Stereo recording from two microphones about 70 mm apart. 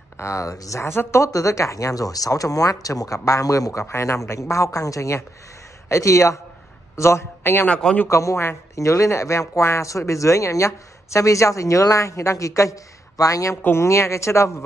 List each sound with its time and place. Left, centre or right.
0.2 s speech: left
0.8 s a man's voice: left
1.2 s a man's voice: left
7.6 s a man's voice: centre
8.1 s speech: left